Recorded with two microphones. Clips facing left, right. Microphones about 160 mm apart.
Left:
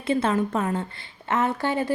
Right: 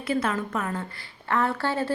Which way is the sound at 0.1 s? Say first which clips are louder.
Left 4 dB; 25° left (ahead or behind).